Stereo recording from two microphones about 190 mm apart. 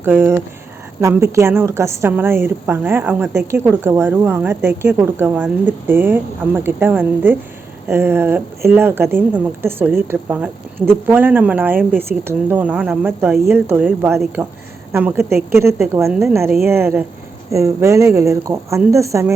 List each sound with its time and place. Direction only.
0.0 s a woman's voice: 10° right (ahead or behind)